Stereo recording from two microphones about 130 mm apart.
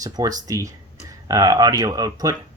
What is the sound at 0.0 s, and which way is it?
Speech, 30° right (ahead or behind).